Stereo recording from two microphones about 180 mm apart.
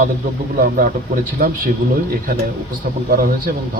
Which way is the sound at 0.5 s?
50° right (ahead or behind).